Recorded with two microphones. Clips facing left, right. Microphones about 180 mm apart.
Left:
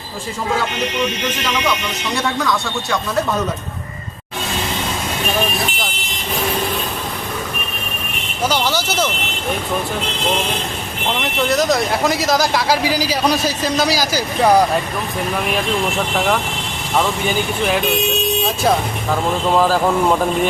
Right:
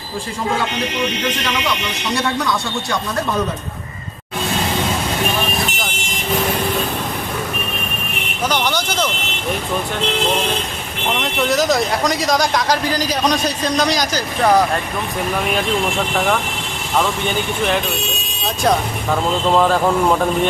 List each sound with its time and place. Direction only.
2.1 s speech: centre (ahead or behind)
8.4 s vehicle: 5° left (ahead or behind)
11.2 s speech: centre (ahead or behind)
16.1 s speech: 5° left (ahead or behind)
18.6 s speech: centre (ahead or behind)